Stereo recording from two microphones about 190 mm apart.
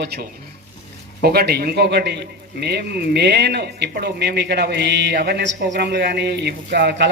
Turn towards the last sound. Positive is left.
turn(degrees=-65)  # may be behind; listen again after turning